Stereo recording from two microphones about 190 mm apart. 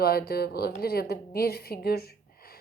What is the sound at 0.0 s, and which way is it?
A woman's voice, 55° left (ahead or behind).